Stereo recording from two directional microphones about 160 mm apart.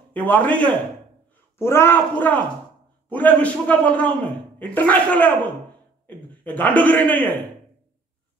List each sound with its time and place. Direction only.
0.1 s a man's voice: 10° left (ahead or behind)